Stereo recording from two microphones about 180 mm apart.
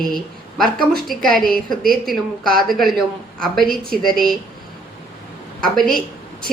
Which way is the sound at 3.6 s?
55° right (ahead or behind).